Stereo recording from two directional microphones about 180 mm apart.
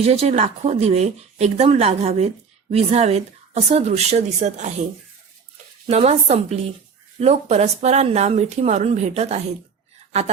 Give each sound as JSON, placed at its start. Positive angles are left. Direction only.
{"t": 0.0, "sound": "speech", "side_deg": -35}
{"t": 5.9, "sound": "speech", "side_deg": -35}